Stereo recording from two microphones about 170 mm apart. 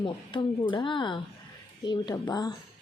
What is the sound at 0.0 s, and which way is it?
A woman's voice, 30° left (ahead or behind).